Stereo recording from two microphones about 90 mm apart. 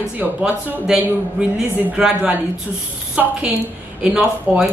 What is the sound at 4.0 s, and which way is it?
Speech, 10° right (ahead or behind).